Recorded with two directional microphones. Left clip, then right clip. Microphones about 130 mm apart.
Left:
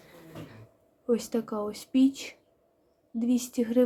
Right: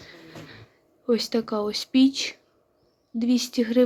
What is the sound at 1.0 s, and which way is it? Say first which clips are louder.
Speech: right 4 dB; 5° right (ahead or behind).